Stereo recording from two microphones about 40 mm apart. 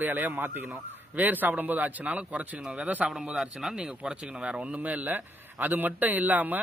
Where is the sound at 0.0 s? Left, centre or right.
Right.